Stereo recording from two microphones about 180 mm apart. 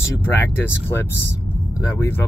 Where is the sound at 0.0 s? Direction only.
10° left (ahead or behind).